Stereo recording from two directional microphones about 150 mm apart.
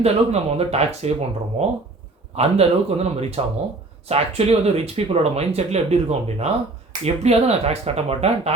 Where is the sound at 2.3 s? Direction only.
45° right (ahead or behind).